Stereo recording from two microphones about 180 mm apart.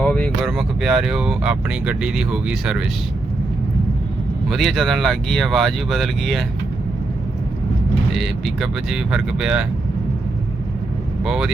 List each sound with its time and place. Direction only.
0.0 s speech: centre (ahead or behind)
4.4 s speech: centre (ahead or behind)
8.1 s speech: centre (ahead or behind)
11.2 s speech: 5° right (ahead or behind)